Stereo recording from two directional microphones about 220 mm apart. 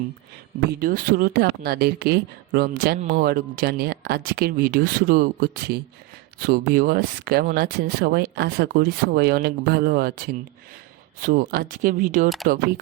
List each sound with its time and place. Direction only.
0.7 s speech: 40° right (ahead or behind)